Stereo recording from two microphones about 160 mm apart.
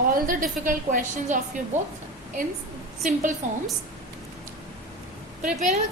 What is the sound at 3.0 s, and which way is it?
Speech, 50° right (ahead or behind).